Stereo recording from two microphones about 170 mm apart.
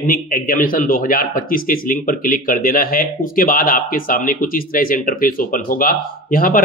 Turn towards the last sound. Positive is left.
turn(degrees=55)  # may be behind; listen again after turning